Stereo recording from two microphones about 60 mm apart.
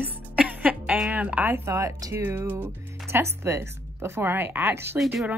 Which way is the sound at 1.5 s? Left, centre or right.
Right.